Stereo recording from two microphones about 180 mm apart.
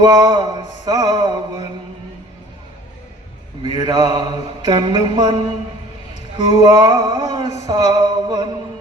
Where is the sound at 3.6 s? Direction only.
25° right (ahead or behind).